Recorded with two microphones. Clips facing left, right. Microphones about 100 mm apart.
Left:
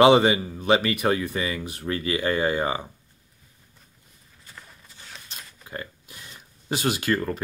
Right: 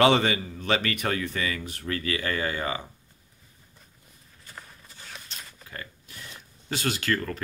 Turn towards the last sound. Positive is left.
turn(degrees=20)  # may be behind; listen again after turning